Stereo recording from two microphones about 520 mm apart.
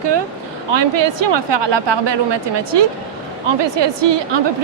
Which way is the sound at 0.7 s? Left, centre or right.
Right.